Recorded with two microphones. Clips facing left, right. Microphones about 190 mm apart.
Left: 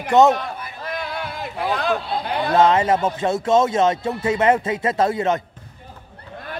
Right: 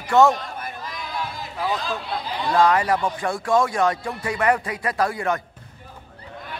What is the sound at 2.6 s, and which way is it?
Speech, 20° left (ahead or behind).